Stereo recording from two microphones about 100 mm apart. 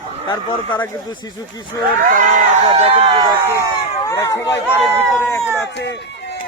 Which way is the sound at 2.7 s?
80° right.